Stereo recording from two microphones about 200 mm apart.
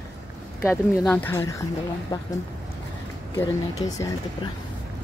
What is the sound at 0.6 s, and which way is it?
A woman's voice, 10° left (ahead or behind).